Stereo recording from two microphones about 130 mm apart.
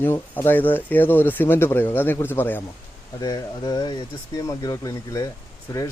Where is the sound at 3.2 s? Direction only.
30° left (ahead or behind).